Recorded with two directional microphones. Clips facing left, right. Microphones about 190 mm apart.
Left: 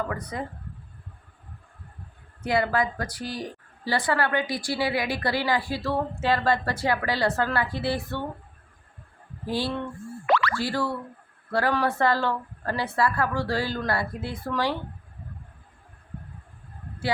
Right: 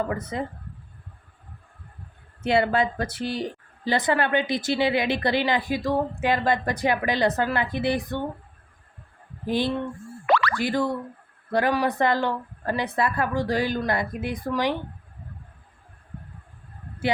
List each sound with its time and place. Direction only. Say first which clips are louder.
0.0 s a woman's voice: right 3 dB; 25° right (ahead or behind)
2.4 s a woman's voice: right 3 dB; 25° right (ahead or behind)
9.5 s a woman's voice: right 3 dB; 20° right (ahead or behind)